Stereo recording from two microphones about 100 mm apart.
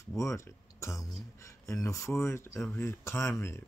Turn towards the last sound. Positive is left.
turn(degrees=25)  # may be behind; listen again after turning